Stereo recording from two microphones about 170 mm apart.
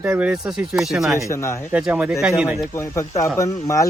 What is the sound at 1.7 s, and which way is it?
Speech, 5° right (ahead or behind).